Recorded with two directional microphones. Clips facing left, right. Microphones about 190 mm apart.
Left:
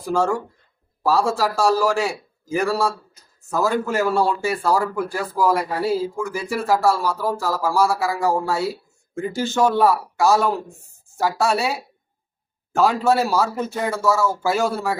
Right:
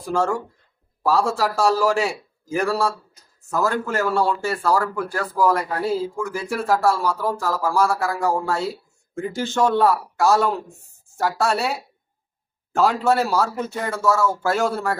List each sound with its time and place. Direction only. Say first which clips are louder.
0.0 s speech: left 1 dB; centre (ahead or behind)